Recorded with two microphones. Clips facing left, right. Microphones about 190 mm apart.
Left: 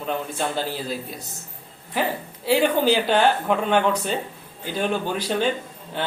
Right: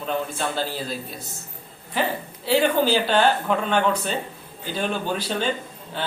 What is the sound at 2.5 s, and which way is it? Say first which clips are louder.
Speech: left 1 dB; 15° left (ahead or behind).